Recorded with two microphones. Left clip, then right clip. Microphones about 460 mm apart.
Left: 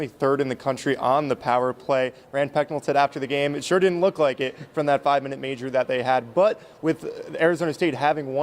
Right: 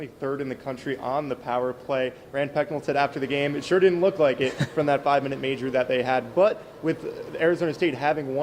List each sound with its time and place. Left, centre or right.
0.0 s speech: left